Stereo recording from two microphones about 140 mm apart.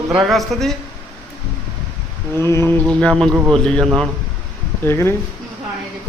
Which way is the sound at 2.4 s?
20° left (ahead or behind).